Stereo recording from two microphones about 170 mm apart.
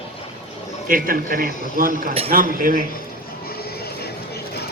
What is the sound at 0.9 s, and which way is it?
Speech, 55° right (ahead or behind).